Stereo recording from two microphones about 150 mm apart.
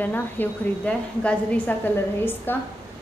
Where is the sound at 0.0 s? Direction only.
10° left (ahead or behind).